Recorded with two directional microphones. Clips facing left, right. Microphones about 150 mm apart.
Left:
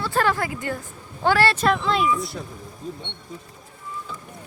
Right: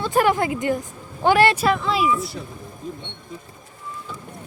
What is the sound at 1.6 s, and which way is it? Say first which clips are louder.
Speech: right 1 dB; 5° right (ahead or behind).